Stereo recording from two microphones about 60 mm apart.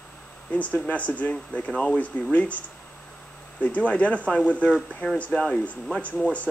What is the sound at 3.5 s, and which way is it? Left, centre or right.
Speech, left.